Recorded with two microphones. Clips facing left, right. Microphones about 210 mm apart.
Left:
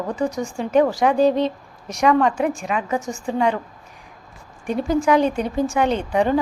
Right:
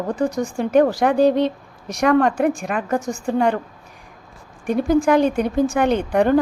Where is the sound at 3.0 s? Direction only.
35° right (ahead or behind).